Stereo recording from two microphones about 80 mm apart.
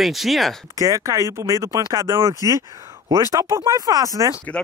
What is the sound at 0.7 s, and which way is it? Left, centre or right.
Speech, right.